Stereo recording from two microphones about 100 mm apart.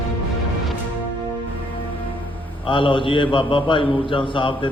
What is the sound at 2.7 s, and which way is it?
A man's voice, 60° left (ahead or behind).